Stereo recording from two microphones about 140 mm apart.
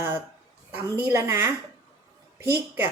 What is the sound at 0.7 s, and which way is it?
A woman's voice, 15° right (ahead or behind).